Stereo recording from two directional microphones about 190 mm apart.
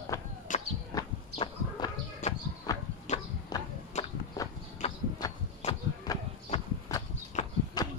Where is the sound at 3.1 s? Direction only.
40° left (ahead or behind).